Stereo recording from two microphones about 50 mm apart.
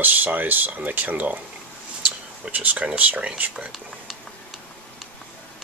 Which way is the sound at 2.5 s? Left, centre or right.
Right.